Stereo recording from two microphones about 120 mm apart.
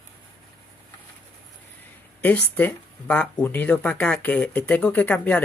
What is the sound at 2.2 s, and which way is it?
Speech, 15° left (ahead or behind).